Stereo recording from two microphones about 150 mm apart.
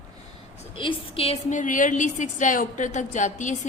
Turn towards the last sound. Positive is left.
turn(degrees=55)  # may be behind; listen again after turning